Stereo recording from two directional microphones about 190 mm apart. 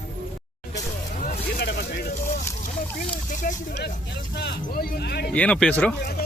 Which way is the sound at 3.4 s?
45° left (ahead or behind).